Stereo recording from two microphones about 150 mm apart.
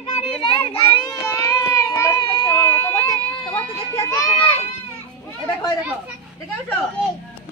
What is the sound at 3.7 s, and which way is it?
Children playing, 20° left (ahead or behind).